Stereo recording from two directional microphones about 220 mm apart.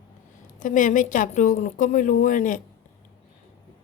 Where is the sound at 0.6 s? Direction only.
35° left (ahead or behind).